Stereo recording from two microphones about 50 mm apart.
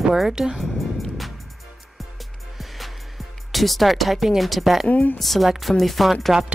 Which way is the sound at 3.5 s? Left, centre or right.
Centre.